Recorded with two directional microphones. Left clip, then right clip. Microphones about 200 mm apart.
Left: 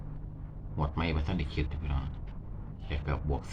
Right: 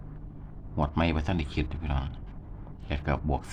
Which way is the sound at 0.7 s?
50° right (ahead or behind).